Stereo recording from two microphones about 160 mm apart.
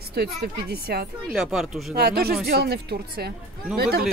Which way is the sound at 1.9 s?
70° right (ahead or behind).